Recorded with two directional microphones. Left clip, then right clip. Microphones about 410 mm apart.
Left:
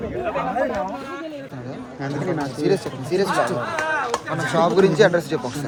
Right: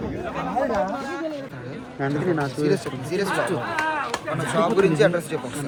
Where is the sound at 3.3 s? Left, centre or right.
Centre.